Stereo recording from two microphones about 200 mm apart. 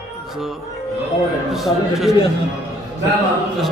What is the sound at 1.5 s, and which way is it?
Speech, centre (ahead or behind).